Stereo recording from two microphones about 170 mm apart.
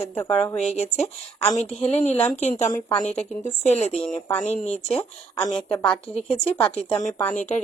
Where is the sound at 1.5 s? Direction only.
40° left (ahead or behind).